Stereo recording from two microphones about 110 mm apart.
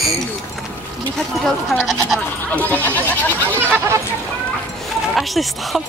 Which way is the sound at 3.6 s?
20° right (ahead or behind).